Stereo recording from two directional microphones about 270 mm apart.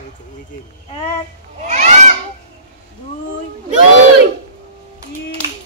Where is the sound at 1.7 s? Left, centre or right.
Right.